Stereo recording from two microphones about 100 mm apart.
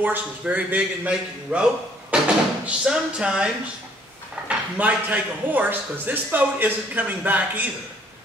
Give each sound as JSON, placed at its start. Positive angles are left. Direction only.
{"t": 0.0, "sound": "a man's voice", "side_deg": -15}